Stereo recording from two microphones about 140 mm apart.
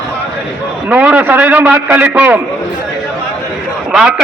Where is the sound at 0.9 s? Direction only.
10° right (ahead or behind).